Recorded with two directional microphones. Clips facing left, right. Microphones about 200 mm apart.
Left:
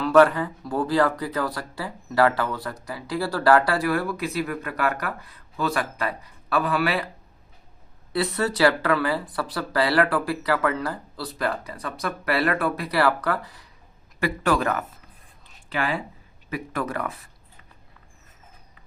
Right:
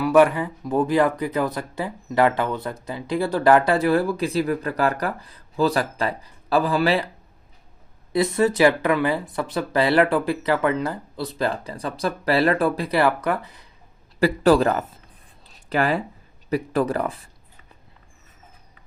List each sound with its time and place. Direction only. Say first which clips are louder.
0.0 s speech: right 1 dB; 10° right (ahead or behind); by 7.0 s 30° right (ahead or behind)
8.1 s speech: right 5 dB; 20° right (ahead or behind)
14.2 s speech: right 7 dB; 30° right (ahead or behind)
15.4 s a sound: right 5 dB; 40° right (ahead or behind)
16.5 s speech: right 7 dB; 30° right (ahead or behind)